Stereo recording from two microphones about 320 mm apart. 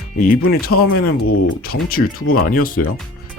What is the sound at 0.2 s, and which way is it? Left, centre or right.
Speech, left.